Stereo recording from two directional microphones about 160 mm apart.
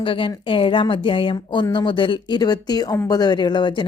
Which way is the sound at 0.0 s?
35° left (ahead or behind).